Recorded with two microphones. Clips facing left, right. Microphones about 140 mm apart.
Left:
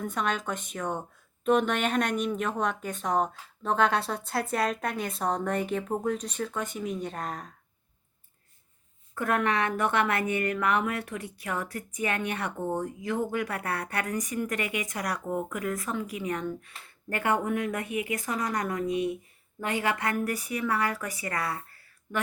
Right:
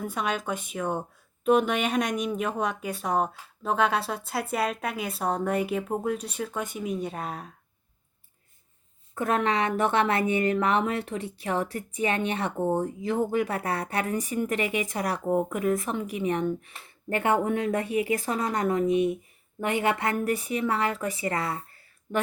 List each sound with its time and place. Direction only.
0.0 s speech: 10° right (ahead or behind)
9.1 s speech: 20° right (ahead or behind)